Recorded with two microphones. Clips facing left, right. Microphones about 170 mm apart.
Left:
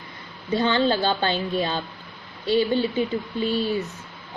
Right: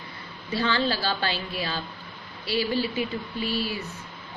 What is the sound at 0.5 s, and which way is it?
Speech, 25° left (ahead or behind).